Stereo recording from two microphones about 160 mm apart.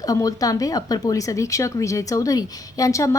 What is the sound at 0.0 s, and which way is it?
Speech, 20° left (ahead or behind).